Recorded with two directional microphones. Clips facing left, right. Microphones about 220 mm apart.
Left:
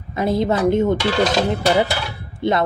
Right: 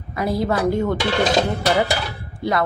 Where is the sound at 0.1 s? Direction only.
20° left (ahead or behind).